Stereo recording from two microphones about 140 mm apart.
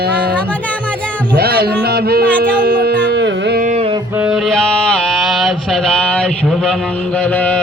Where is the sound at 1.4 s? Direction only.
90° right.